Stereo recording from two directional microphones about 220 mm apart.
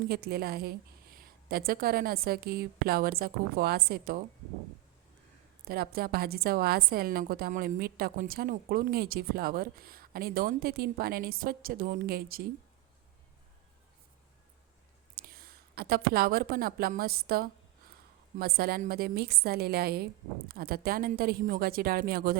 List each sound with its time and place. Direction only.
0.1 s a woman's voice: 45° right (ahead or behind)
5.6 s a woman's voice: 45° right (ahead or behind)
15.1 s a woman's voice: 40° right (ahead or behind)